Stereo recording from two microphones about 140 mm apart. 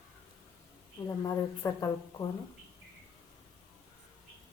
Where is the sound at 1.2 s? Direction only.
25° left (ahead or behind).